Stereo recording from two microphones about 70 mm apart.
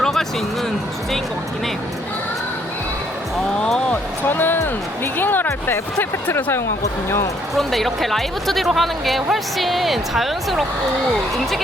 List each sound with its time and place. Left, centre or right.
0.0 s music: centre
3.6 s a sound: centre
4.3 s speech: left
7.5 s speech: centre